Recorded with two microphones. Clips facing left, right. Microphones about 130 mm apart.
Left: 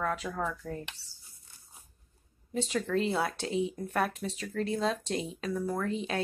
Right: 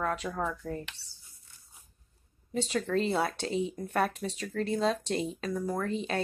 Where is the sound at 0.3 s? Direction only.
15° right (ahead or behind).